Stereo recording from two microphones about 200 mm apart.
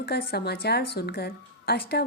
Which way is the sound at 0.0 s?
50° left (ahead or behind).